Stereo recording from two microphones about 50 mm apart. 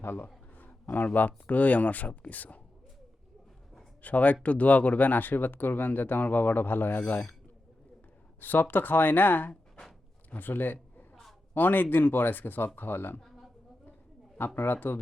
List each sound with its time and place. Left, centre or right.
0.0 s speech: left
0.5 s a sound: left
1.5 s speech: left
4.0 s speech: left
8.4 s speech: left
11.1 s a sound: centre
11.5 s speech: left
14.3 s speech: left